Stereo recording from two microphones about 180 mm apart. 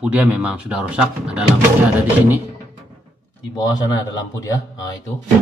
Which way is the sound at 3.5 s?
20° left (ahead or behind).